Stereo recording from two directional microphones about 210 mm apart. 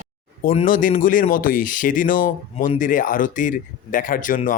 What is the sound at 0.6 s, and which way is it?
Speech, 40° left (ahead or behind).